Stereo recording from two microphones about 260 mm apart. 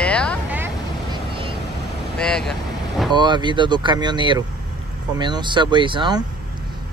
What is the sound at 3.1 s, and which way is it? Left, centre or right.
Speech, centre.